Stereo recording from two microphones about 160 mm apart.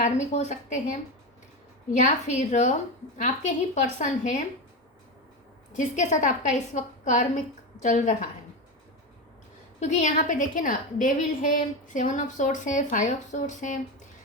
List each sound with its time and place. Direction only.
0.0 s a woman's voice: 50° left (ahead or behind)
5.7 s a woman's voice: 50° left (ahead or behind)
9.8 s a woman's voice: 45° left (ahead or behind)